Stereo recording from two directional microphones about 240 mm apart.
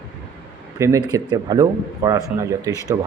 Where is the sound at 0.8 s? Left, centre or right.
Centre.